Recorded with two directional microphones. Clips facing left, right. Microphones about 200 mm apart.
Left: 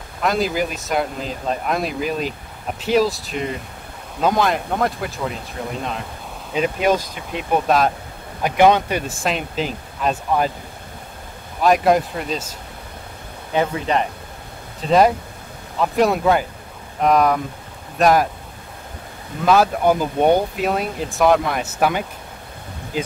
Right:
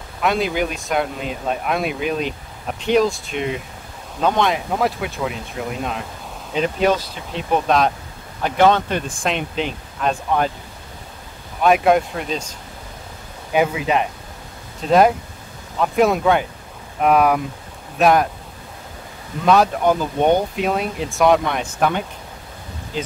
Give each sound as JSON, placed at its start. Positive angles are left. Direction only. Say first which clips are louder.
{"t": 0.2, "sound": "speech", "louder": "even", "side_deg": 0}
{"t": 6.5, "sound": "speech", "louder": "even", "side_deg": 10}
{"t": 11.6, "sound": "speech", "louder": "right 1 dB", "side_deg": 0}
{"t": 13.5, "sound": "speech", "louder": "right 2 dB", "side_deg": -10}
{"t": 19.4, "sound": "speech", "louder": "even", "side_deg": 5}